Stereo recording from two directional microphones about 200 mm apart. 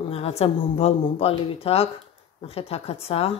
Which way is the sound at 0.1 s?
30° left (ahead or behind).